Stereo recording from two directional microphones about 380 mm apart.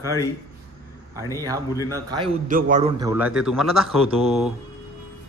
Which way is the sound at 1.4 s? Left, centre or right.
Centre.